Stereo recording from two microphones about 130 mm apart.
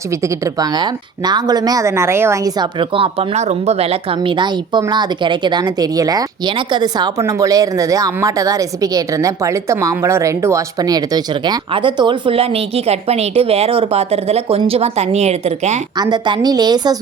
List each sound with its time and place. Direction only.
0.1 s speech: 25° right (ahead or behind)
2.7 s speech: 45° right (ahead or behind)
11.7 s speech: 40° right (ahead or behind); by 15.8 s 60° right (ahead or behind)
16.0 s a woman's voice: 35° right (ahead or behind)